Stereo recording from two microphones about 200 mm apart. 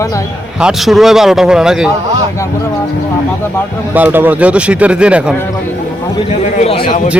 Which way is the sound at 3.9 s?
10° right (ahead or behind).